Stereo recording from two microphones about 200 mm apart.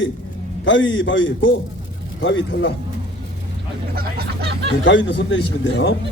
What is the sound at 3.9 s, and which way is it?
Speech, 50° right (ahead or behind).